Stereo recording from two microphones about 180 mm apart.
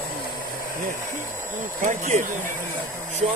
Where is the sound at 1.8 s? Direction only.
45° right (ahead or behind).